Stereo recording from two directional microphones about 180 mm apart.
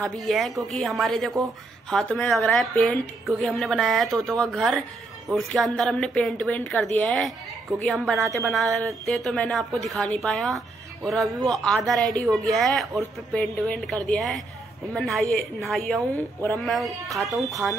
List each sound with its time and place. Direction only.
0.0 s a woman's voice: centre (ahead or behind)
17.1 s speech: 20° right (ahead or behind)